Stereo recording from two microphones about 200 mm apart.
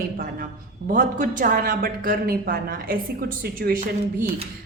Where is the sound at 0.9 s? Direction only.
40° right (ahead or behind).